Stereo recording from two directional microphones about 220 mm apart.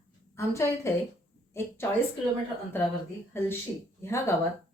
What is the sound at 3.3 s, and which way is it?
Speech, 10° left (ahead or behind).